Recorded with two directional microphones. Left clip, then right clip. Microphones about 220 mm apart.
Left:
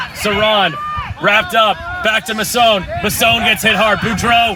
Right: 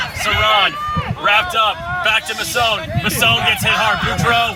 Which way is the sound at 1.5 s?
40° left (ahead or behind).